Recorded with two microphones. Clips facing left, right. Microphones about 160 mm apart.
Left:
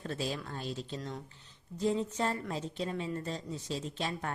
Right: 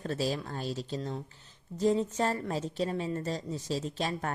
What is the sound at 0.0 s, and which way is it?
A woman's voice, 35° right (ahead or behind).